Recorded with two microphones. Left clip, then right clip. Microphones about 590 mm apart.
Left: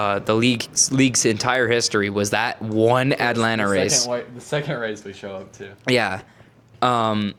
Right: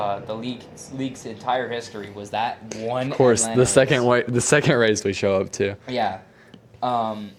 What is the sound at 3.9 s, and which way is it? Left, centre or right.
Speech, right.